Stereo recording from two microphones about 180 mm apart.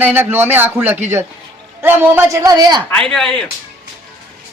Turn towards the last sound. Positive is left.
turn(degrees=5)  # may be behind; listen again after turning